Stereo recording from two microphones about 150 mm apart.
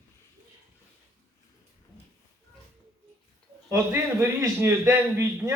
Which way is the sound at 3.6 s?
20° right (ahead or behind).